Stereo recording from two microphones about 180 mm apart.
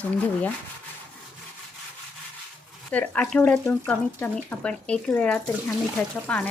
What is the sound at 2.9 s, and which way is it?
Speech, 10° left (ahead or behind).